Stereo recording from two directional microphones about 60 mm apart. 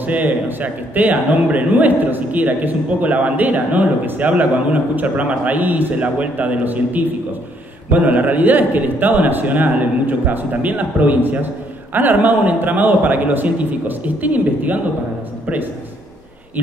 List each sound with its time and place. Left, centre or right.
0.0 s a man's voice: right